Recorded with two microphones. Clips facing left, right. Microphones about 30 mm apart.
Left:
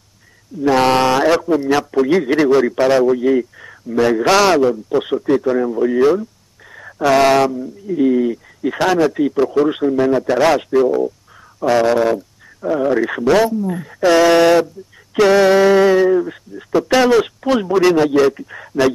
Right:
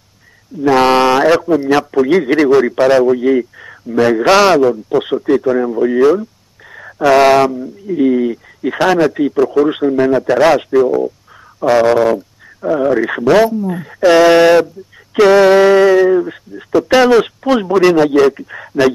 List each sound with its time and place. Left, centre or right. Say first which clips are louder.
0.6 s a man's voice: right 3 dB; centre
9.9 s speech: right 3 dB; right
10.9 s a man's voice: right 2 dB; centre